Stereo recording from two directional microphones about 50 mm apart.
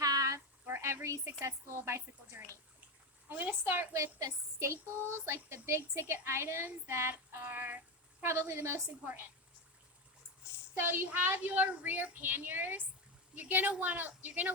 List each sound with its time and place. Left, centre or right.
0.3 s a sound: right
1.0 s speech: right
2.4 s a woman's voice: right
3.9 s speech: right
8.2 s speech: right
10.8 s a woman's voice: right
11.5 s speech: right
12.2 s a woman's voice: right